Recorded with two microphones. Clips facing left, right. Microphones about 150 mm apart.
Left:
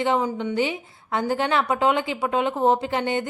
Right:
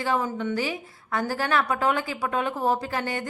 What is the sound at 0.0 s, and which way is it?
A woman's voice, 20° left (ahead or behind).